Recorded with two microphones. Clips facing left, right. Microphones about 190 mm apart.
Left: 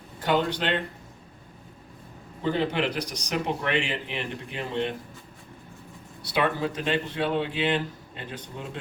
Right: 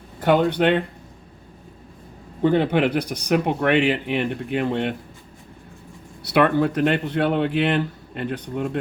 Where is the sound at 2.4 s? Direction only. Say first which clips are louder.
Right 7 dB; 60° right (ahead or behind).